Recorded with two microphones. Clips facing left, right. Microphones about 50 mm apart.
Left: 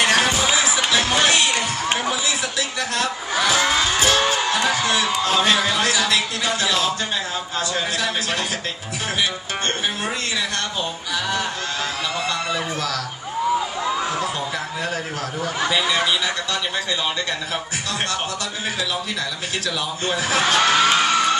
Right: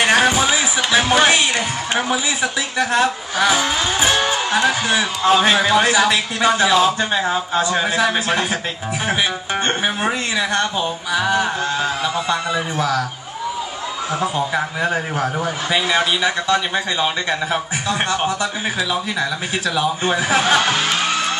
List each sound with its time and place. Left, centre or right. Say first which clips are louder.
0.0 s music: right 3 dB; centre
2.0 s speech: right 4 dB; right
11.1 s speech: right 6 dB; centre
14.2 s speech: right 5 dB; right
19.8 s speech: right 7 dB; right